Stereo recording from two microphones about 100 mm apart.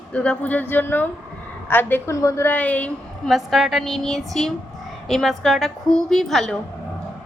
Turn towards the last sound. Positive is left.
turn(degrees=5)  # may be behind; listen again after turning